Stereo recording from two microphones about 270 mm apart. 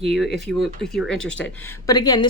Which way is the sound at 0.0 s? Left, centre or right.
Centre.